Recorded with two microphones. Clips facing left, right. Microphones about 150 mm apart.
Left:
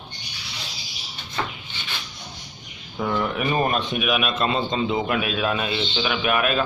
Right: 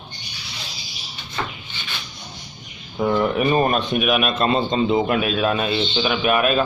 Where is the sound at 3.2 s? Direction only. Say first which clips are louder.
Right 4 dB; 35° right (ahead or behind).